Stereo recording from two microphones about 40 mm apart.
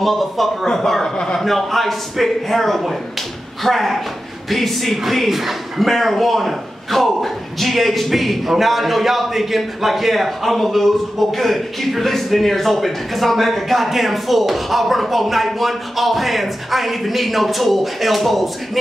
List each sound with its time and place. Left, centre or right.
0.0 s speech: centre
1.4 s speech: centre